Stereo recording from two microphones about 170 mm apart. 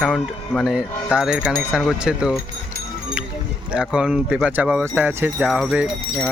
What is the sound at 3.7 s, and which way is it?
Speech, 5° right (ahead or behind).